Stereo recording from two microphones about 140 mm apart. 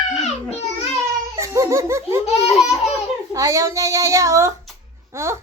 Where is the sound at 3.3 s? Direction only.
25° right (ahead or behind).